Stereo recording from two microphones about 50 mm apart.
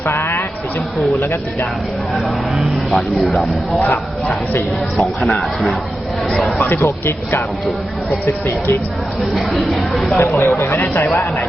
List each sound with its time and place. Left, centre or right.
0.1 s a sound: left
2.6 s speech: centre
3.8 s speech: left
4.9 s speech: centre
6.4 s speech: left
9.3 s speech: centre
10.2 s speech: left
10.9 s speech: left